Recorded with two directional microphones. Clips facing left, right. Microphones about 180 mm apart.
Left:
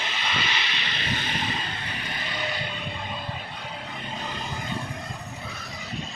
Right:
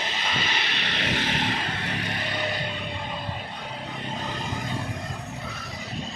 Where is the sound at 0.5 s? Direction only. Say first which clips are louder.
Right 2 dB; 55° right (ahead or behind).